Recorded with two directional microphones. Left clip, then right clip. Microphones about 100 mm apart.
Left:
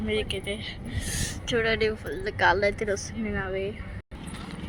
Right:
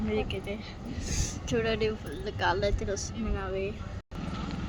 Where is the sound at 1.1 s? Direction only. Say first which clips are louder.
Left 4 dB; 40° left (ahead or behind).